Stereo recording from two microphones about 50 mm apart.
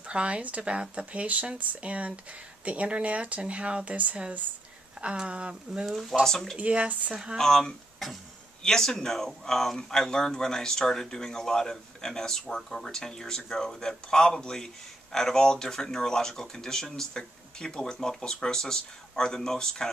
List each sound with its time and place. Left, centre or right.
0.0 s speech: right
5.0 s speech: right
5.9 s speech: centre
6.2 s speech: centre
6.6 s speech: right
7.3 s speech: centre